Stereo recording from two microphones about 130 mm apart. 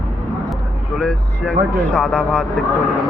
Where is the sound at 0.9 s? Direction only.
5° left (ahead or behind).